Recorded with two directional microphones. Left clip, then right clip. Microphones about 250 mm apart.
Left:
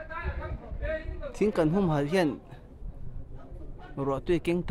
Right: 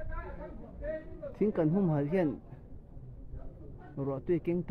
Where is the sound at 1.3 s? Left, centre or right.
Left.